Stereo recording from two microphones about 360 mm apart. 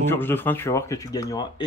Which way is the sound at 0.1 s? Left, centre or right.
Centre.